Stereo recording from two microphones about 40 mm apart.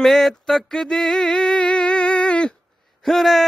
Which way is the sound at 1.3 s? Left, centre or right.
Left.